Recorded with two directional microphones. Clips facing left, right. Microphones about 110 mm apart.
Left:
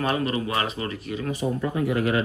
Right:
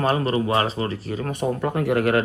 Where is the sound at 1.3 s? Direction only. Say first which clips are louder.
Right 2 dB; 60° right (ahead or behind).